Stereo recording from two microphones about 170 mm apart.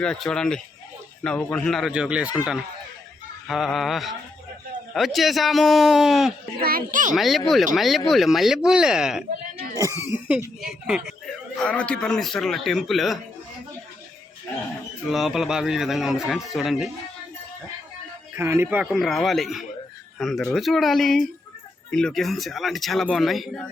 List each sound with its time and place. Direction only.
0.0 s speech: 5° left (ahead or behind)
3.4 s speech: centre (ahead or behind)
6.6 s a child's voice: 60° right (ahead or behind)
7.2 s speech: centre (ahead or behind)
9.7 s speech: 15° right (ahead or behind)
11.6 s speech: 5° left (ahead or behind)
15.1 s speech: centre (ahead or behind)
18.3 s speech: 15° right (ahead or behind)
18.9 s speech: centre (ahead or behind)